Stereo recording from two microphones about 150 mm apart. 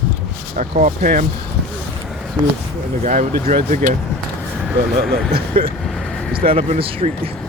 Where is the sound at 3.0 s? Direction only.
55° right (ahead or behind).